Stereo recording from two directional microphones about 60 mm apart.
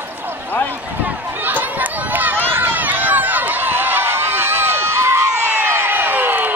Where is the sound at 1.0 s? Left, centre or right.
Right.